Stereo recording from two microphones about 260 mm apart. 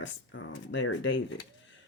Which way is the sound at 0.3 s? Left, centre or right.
Left.